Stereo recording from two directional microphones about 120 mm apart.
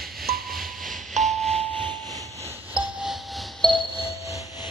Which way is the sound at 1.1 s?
75° right (ahead or behind).